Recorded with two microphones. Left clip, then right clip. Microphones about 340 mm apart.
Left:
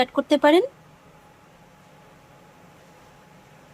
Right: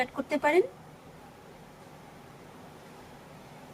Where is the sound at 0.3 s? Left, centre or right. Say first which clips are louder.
Left 8 dB; centre.